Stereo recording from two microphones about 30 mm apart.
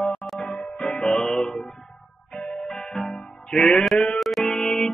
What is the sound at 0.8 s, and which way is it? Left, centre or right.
Music, centre.